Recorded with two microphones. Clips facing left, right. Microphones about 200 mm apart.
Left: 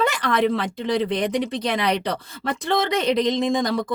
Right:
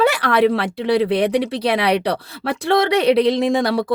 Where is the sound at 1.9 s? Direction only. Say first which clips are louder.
Right 5 dB; 65° right (ahead or behind).